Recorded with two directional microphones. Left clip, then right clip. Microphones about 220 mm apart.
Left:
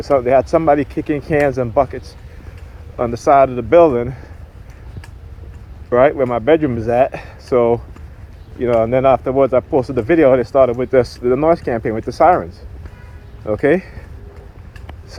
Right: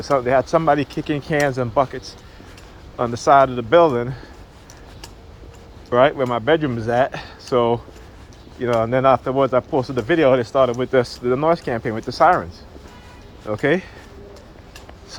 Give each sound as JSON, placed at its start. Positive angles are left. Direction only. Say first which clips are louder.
{"t": 0.0, "sound": "speech", "louder": "left 4 dB", "side_deg": 40}
{"t": 3.0, "sound": "speech", "louder": "left 2 dB", "side_deg": 35}
{"t": 5.9, "sound": "speech", "louder": "left 3 dB", "side_deg": 35}